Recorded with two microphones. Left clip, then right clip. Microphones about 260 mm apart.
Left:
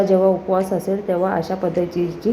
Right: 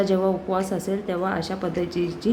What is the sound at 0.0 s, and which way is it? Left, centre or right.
A woman's voice, centre.